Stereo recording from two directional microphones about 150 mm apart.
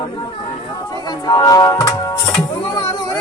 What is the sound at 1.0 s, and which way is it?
Music, 25° left (ahead or behind).